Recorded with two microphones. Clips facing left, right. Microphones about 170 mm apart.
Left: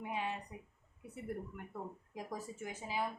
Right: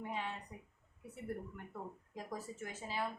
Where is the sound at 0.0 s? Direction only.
15° left (ahead or behind).